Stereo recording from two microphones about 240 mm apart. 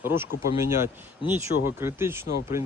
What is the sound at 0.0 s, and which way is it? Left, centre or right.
Speech, centre.